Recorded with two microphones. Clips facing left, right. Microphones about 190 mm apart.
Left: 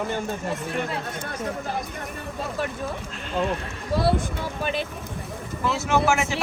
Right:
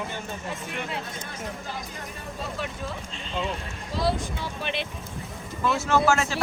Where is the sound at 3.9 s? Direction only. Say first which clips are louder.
Left 4 dB; 60° left (ahead or behind); by 4.8 s 40° left (ahead or behind).